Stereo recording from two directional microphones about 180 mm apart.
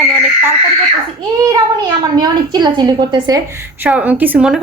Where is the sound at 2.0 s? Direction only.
20° right (ahead or behind).